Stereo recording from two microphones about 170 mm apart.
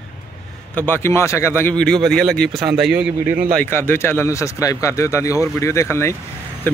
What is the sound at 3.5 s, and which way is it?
Speech, 15° left (ahead or behind).